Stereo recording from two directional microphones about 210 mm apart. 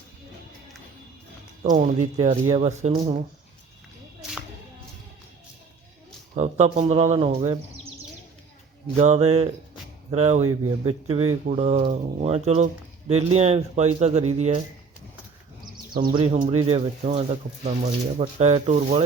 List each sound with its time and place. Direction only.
1.7 s speech: 35° right (ahead or behind)
2.1 s speech: 25° right (ahead or behind)
6.3 s speech: 30° right (ahead or behind)
9.0 s speech: 30° right (ahead or behind)
16.0 s speech: 25° right (ahead or behind)